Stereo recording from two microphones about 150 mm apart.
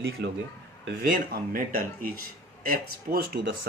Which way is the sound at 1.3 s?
70° right (ahead or behind).